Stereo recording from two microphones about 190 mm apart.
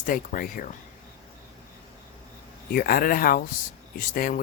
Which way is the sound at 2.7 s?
50° left (ahead or behind).